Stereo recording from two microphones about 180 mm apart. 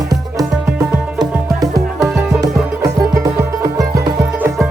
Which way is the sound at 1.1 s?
20° right (ahead or behind).